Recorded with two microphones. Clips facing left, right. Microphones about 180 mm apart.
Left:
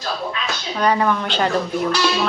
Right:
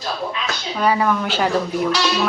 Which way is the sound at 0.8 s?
5° right (ahead or behind).